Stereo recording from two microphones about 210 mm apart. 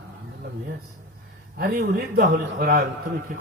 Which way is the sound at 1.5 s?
45° right (ahead or behind).